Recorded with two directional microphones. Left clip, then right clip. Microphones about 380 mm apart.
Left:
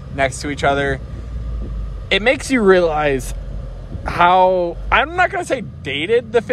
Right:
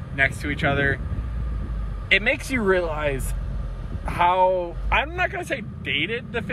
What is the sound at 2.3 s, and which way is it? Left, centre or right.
Speech, left.